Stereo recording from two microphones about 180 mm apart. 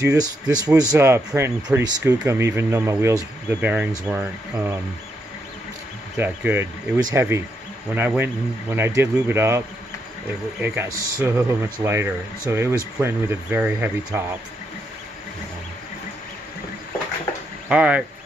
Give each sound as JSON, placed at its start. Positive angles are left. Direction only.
{"t": 0.0, "sound": "speech", "side_deg": -20}
{"t": 6.1, "sound": "speech", "side_deg": -10}
{"t": 10.6, "sound": "speech", "side_deg": -10}
{"t": 17.6, "sound": "speech", "side_deg": -5}